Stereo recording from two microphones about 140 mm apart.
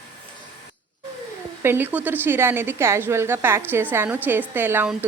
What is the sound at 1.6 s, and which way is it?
A woman's voice, 15° right (ahead or behind).